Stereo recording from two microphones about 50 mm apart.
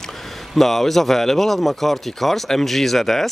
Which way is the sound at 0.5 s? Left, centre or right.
Centre.